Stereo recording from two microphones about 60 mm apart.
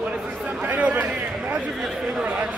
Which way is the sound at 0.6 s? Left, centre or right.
Right.